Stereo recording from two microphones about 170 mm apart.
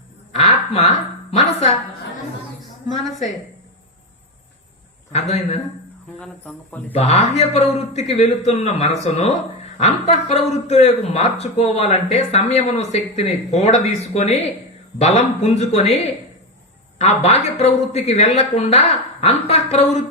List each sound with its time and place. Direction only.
0.3 s a sound: 40° left (ahead or behind)
2.9 s speech: centre (ahead or behind)
5.1 s a man's voice: 40° left (ahead or behind)
6.1 s speech: 5° left (ahead or behind)
6.9 s a man's voice: 40° left (ahead or behind)
17.0 s a man's voice: 40° left (ahead or behind)